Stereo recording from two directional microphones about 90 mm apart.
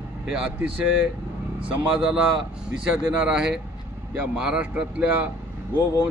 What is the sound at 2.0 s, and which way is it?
Speech, 5° right (ahead or behind).